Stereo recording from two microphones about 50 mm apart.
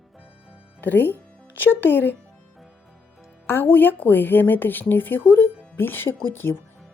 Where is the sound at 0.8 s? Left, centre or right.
Left.